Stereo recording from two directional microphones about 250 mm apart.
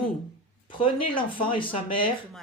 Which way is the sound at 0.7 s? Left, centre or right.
Centre.